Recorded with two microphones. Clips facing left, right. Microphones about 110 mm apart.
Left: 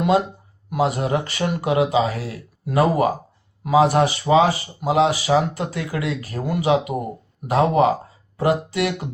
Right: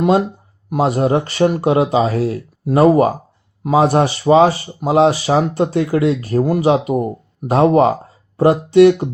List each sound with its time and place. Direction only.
0.7 s speech: 35° right (ahead or behind)